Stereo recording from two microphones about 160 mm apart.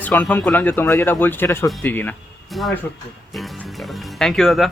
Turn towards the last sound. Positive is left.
turn(degrees=0)  # may be behind; listen again after turning